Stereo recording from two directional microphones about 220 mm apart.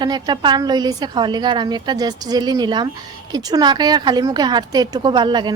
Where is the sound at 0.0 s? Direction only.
20° right (ahead or behind).